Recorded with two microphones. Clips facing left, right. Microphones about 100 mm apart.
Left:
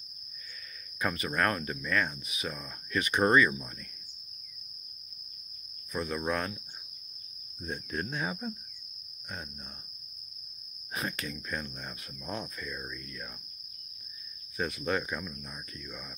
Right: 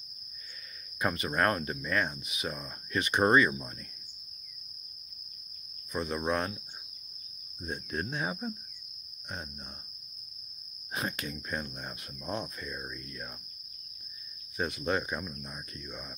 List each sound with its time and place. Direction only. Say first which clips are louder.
0.9 s cricket: right 1 dB; 20° right (ahead or behind)
5.9 s cricket: right 1 dB; 20° right (ahead or behind)
8.0 s cricket: right 1 dB; 15° right (ahead or behind)
10.9 s cricket: right 1 dB; 20° right (ahead or behind)
13.0 s cricket: right 1 dB; 30° right (ahead or behind)
14.6 s cricket: even; 15° right (ahead or behind)